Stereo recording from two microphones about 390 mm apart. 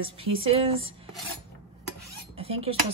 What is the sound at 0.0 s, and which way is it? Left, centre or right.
Speech, centre.